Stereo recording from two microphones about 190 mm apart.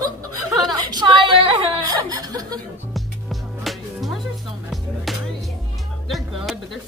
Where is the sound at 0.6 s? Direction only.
20° right (ahead or behind).